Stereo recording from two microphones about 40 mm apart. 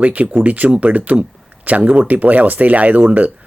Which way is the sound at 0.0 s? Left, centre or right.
Right.